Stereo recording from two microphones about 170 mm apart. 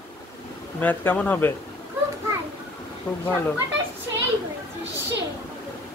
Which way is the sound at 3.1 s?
5° left (ahead or behind).